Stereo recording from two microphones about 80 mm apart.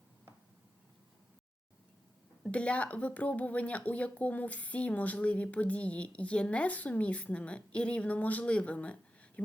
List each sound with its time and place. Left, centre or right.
2.4 s speech: centre